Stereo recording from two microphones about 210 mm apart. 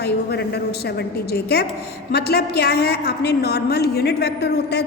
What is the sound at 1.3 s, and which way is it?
A woman's voice, 50° left (ahead or behind).